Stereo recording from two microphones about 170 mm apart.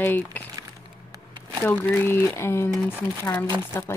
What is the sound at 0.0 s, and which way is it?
Speech, 10° left (ahead or behind).